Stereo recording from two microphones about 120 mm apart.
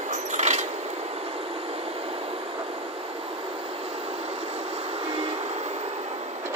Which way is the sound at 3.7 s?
55° right (ahead or behind).